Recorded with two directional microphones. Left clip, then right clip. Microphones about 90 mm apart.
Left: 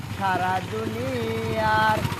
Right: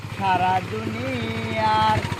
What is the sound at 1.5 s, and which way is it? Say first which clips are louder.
Vehicle: right 2 dB; 35° left (ahead or behind).